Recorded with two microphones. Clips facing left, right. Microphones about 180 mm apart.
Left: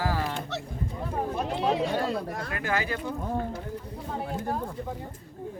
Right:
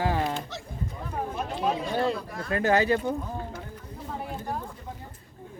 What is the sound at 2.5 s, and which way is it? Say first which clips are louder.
Speech: right 9 dB; 35° right (ahead or behind).